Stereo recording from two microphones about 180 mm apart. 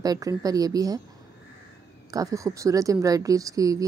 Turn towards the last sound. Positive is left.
turn(degrees=-20)  # may be behind; listen again after turning